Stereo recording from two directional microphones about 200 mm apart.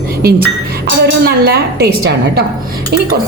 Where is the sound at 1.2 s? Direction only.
55° right (ahead or behind).